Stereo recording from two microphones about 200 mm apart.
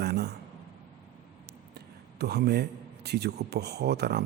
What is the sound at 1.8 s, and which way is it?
A man's voice, 55° right (ahead or behind).